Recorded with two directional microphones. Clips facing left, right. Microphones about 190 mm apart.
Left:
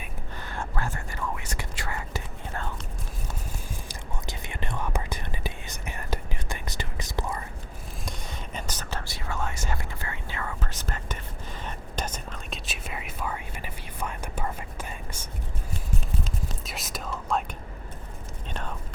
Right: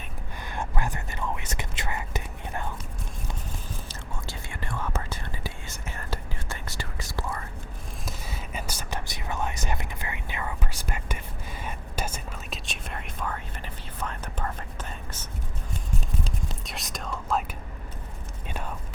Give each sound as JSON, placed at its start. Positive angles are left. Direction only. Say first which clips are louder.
{"t": 0.4, "sound": "whispering", "louder": "right 1 dB", "side_deg": -15}
{"t": 3.8, "sound": "whispering", "louder": "left 1 dB", "side_deg": 20}
{"t": 8.0, "sound": "whispering", "louder": "even", "side_deg": -5}
{"t": 12.6, "sound": "whispering", "louder": "left 1 dB", "side_deg": 5}
{"t": 16.6, "sound": "whispering", "louder": "even", "side_deg": 5}